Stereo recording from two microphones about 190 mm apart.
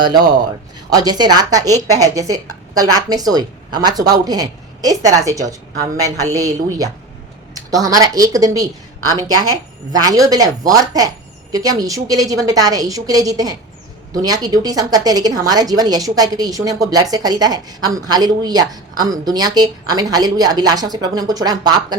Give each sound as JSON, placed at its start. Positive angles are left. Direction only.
{"t": 0.0, "sound": "a woman's voice", "side_deg": -20}